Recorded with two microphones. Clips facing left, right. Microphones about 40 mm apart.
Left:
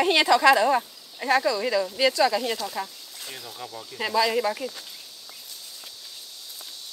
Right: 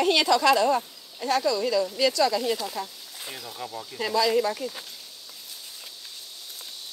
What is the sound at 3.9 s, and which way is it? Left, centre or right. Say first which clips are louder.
Speech: even; centre.